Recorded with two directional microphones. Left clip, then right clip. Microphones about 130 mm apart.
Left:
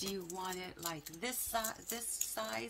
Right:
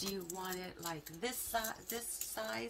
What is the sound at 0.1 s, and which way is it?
A woman's voice, 25° left (ahead or behind).